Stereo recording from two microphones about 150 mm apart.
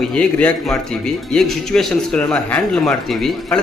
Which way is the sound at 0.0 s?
5° left (ahead or behind).